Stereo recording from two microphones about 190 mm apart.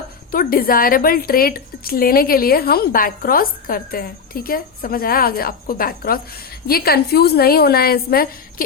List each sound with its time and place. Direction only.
0.3 s a woman's voice: 50° left (ahead or behind)